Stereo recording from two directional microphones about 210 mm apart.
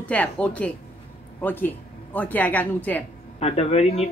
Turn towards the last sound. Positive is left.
turn(degrees=30)  # may be behind; listen again after turning